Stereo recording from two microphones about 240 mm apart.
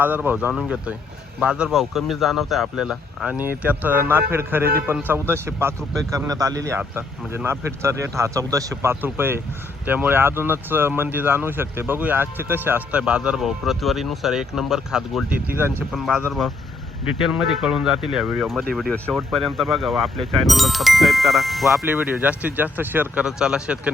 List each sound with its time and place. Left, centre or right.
0.0 s speech: centre